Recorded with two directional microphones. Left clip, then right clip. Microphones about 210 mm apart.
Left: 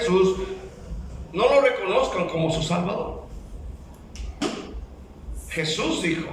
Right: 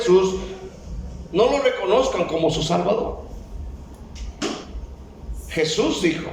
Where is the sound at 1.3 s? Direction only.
25° right (ahead or behind).